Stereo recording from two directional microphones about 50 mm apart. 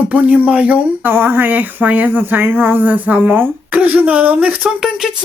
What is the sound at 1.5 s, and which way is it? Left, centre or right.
Speech, right.